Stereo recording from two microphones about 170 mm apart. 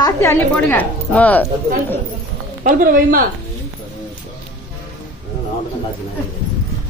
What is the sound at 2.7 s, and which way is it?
Speech, 55° right (ahead or behind).